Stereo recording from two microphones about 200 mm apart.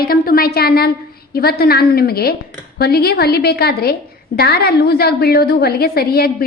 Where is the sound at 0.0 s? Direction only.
50° left (ahead or behind).